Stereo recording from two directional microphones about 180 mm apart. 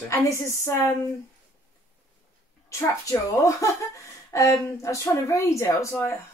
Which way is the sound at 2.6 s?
15° left (ahead or behind).